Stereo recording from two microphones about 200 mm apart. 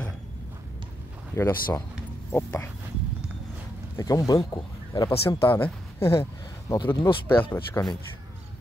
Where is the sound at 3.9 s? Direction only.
15° left (ahead or behind).